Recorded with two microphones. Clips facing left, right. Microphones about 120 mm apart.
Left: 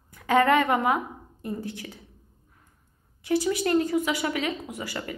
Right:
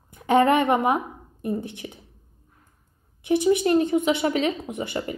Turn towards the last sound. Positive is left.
turn(degrees=-25)  # may be behind; listen again after turning